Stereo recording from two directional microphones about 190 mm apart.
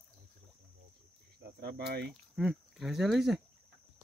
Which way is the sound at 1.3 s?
60° right (ahead or behind).